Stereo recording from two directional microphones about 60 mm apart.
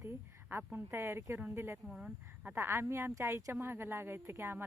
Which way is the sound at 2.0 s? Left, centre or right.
Centre.